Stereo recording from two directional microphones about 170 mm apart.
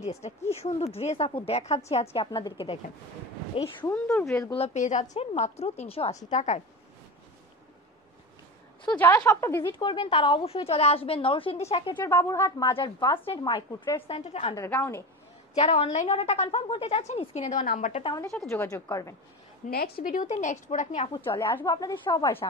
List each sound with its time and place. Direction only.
0.0 s a woman's voice: 40° left (ahead or behind)
3.8 s speech: 15° left (ahead or behind)
4.6 s a woman's voice: 45° left (ahead or behind)
8.8 s speech: 10° left (ahead or behind)
9.7 s a woman's voice: 30° left (ahead or behind)
12.0 s speech: 15° left (ahead or behind)
13.9 s a woman's voice: 35° left (ahead or behind)
14.5 s speech: 15° left (ahead or behind)
15.5 s a woman's voice: 35° left (ahead or behind)
18.0 s speech: 20° left (ahead or behind)
19.7 s speech: 60° left (ahead or behind); by 21.2 s 40° left (ahead or behind)
21.4 s speech: 20° left (ahead or behind)